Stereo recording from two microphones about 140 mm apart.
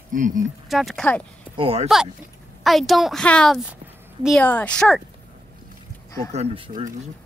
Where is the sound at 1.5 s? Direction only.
40° right (ahead or behind).